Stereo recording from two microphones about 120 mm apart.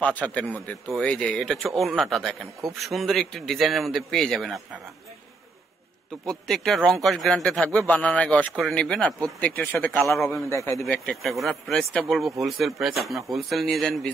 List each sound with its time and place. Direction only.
0.0 s a man's voice: 10° left (ahead or behind)
6.2 s a man's voice: centre (ahead or behind)
10.1 s a man's voice: centre (ahead or behind)
10.5 s speech: 25° left (ahead or behind)
10.9 s a man's voice: 5° left (ahead or behind)